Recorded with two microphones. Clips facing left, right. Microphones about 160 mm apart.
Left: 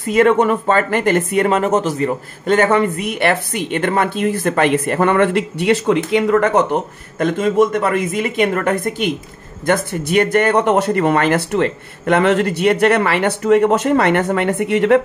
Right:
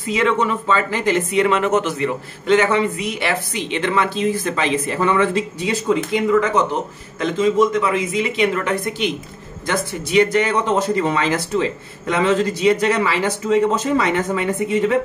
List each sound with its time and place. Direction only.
0.0 s speech: 55° left (ahead or behind); by 15.0 s 70° left (ahead or behind)